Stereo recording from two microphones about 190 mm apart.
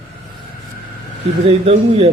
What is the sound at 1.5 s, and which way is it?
Speech, 35° right (ahead or behind).